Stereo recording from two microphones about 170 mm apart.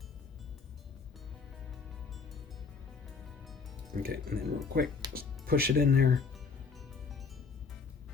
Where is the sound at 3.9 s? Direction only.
60° right (ahead or behind).